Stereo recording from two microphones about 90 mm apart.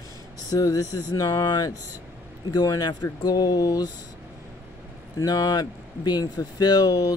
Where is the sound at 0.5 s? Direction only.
40° left (ahead or behind).